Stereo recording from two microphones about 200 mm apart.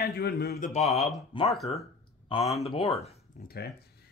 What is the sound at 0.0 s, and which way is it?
Speech, 55° left (ahead or behind).